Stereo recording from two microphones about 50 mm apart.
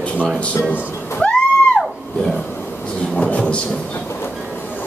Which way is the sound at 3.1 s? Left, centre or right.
Left.